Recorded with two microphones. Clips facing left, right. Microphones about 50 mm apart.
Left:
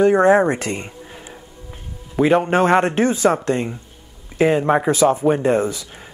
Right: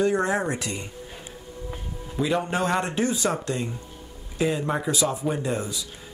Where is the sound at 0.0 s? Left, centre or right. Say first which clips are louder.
Left 10 dB; left.